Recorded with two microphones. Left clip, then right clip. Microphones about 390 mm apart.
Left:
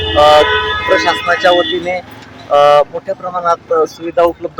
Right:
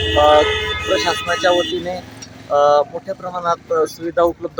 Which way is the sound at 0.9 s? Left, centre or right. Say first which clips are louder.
Left 5 dB; right.